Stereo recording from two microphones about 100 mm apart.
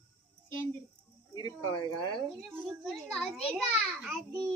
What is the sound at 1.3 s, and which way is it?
Speech, 50° left (ahead or behind).